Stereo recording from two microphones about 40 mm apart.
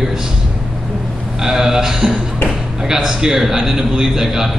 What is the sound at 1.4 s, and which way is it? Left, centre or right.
Speech, centre.